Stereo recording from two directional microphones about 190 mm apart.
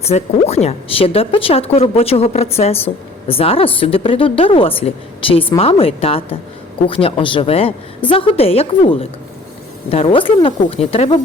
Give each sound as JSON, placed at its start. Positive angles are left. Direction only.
{"t": 0.0, "sound": "a woman's voice", "side_deg": 35}